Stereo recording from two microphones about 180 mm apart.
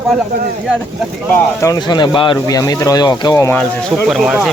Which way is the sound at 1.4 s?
20° left (ahead or behind).